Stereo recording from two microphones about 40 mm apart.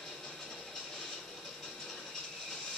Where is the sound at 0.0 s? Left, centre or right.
Centre.